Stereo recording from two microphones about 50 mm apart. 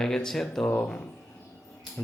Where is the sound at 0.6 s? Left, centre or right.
Left.